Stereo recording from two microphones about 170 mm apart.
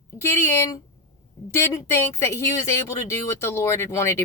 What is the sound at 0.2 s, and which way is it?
Speech, 15° left (ahead or behind).